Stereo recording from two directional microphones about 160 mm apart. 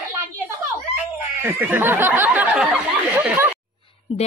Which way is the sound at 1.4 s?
15° right (ahead or behind).